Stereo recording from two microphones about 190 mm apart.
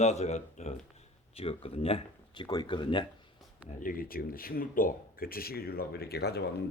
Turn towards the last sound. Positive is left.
turn(degrees=60)  # may be behind; listen again after turning